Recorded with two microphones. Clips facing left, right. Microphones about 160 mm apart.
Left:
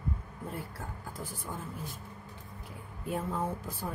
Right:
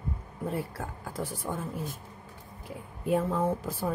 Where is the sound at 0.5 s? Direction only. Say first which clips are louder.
Right 6 dB; 90° right.